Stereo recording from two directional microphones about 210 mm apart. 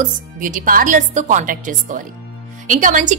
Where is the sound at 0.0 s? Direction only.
40° right (ahead or behind).